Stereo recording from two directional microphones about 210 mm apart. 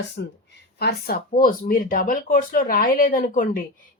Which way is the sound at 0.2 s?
55° left (ahead or behind).